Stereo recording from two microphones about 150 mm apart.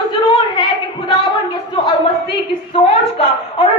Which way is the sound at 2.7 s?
40° left (ahead or behind).